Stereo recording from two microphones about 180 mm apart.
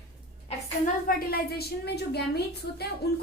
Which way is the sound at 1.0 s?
60° left (ahead or behind).